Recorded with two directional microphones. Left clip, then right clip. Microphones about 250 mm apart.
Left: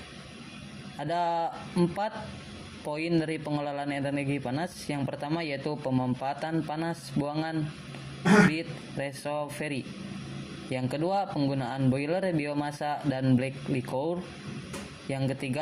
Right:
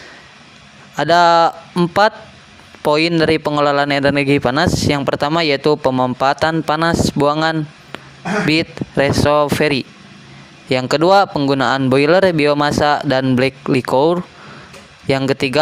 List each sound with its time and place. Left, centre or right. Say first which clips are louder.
0.9 s speech: right 18 dB; right
8.5 s speech: right 18 dB; right